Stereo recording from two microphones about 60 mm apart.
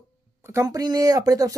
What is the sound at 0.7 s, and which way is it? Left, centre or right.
Speech, right.